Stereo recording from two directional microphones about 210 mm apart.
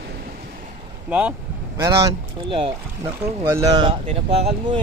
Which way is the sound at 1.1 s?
5° right (ahead or behind).